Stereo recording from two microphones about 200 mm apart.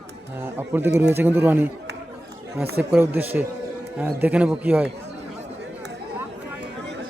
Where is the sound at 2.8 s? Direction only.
10° right (ahead or behind).